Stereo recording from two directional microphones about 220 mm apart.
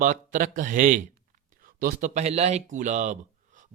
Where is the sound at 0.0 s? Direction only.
35° right (ahead or behind).